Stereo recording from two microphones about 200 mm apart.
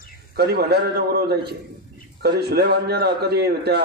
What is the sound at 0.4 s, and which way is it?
A man's voice, 55° right (ahead or behind).